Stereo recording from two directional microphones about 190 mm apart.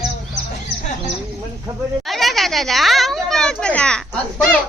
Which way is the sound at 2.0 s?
Centre (ahead or behind).